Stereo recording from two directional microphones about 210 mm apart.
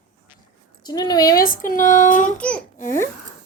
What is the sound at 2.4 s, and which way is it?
Speech, 5° left (ahead or behind).